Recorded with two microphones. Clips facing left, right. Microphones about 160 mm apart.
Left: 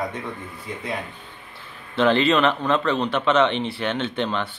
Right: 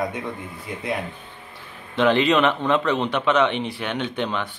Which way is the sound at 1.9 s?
15° right (ahead or behind).